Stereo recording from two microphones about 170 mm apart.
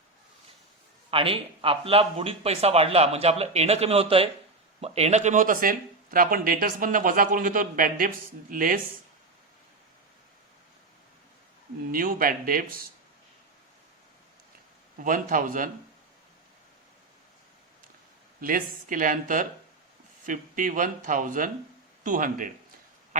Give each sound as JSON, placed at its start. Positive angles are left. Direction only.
{"t": 1.1, "sound": "speech", "side_deg": -35}
{"t": 11.9, "sound": "speech", "side_deg": -55}
{"t": 14.9, "sound": "speech", "side_deg": -50}
{"t": 18.3, "sound": "speech", "side_deg": -55}